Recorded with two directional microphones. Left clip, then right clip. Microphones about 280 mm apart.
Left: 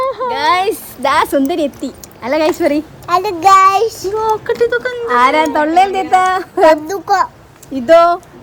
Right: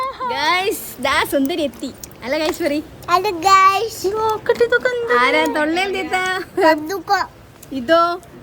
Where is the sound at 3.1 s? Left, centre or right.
Centre.